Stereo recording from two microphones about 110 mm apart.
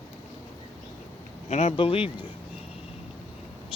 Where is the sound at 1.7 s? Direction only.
55° left (ahead or behind).